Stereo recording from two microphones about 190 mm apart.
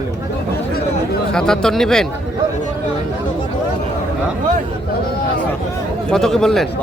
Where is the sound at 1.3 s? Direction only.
5° left (ahead or behind).